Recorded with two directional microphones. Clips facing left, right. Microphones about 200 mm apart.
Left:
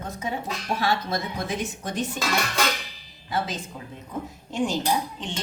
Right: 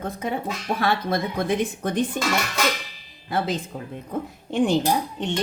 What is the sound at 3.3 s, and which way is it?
Speech, 55° right (ahead or behind).